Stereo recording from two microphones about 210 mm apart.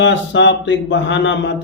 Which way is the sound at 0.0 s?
60° left (ahead or behind).